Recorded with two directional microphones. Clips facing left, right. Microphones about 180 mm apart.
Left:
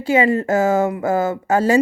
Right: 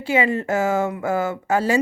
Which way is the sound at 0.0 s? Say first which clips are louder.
Left 4 dB; 40° left (ahead or behind).